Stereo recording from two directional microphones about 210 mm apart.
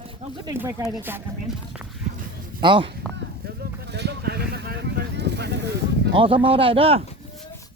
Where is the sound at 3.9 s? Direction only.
55° right (ahead or behind).